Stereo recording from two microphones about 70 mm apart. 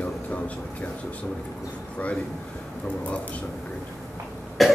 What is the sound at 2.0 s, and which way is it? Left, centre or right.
Speech, centre.